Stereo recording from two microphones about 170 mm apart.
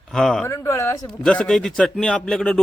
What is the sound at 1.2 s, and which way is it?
A man's voice, 5° left (ahead or behind).